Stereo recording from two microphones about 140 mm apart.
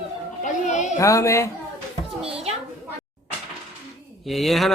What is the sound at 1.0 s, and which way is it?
Speech, 20° left (ahead or behind).